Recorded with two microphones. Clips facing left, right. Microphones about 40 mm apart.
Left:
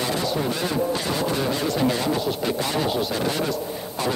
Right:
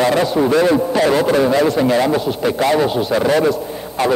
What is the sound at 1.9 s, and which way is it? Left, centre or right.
Speech, right.